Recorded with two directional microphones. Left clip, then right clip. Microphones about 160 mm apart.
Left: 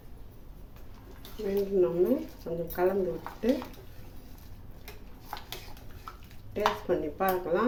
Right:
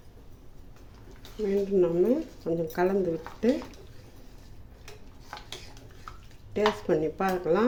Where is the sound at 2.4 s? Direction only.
50° right (ahead or behind).